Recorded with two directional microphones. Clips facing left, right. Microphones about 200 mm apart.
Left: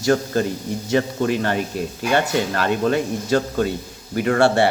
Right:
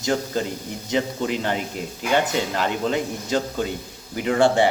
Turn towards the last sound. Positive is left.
turn(degrees=-15)  # may be behind; listen again after turning